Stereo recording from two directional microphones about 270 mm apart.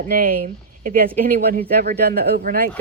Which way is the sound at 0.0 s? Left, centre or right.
Right.